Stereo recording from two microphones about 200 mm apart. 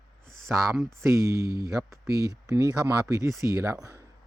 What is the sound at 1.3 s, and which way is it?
Speech, 50° right (ahead or behind).